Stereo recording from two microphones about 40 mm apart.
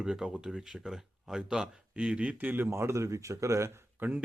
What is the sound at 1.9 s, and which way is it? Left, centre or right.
Speech, right.